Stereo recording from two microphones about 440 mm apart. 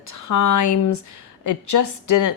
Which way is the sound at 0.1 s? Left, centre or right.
Left.